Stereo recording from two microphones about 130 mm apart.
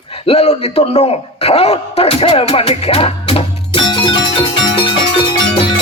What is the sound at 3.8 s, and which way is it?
Music, 35° left (ahead or behind).